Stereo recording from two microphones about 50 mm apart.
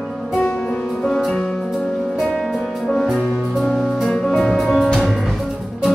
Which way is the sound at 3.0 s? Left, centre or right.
Centre.